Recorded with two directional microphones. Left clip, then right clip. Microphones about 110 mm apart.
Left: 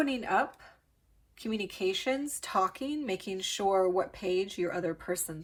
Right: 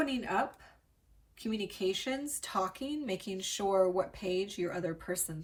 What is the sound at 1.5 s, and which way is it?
A woman's voice, 40° left (ahead or behind).